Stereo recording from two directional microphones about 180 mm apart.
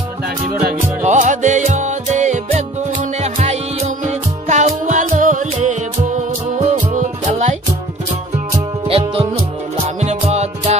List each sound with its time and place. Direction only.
1.0 s music: 45° right (ahead or behind)
8.8 s music: 30° right (ahead or behind)